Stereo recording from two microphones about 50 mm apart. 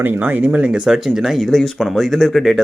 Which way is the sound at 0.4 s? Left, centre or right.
Right.